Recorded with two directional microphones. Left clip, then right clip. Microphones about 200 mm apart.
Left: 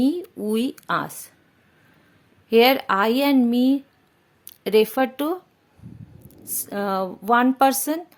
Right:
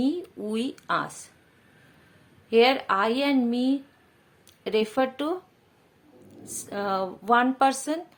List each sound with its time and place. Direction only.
0.0 s speech: 35° left (ahead or behind)
2.5 s speech: 40° left (ahead or behind)
6.4 s speech: 35° left (ahead or behind)